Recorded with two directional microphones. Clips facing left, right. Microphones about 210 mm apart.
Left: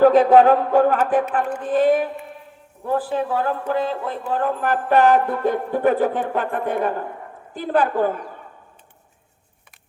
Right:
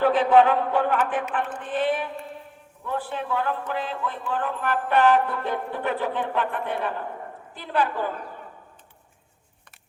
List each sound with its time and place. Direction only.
0.0 s music: 40° left (ahead or behind)
7.5 s a woman's voice: 50° left (ahead or behind)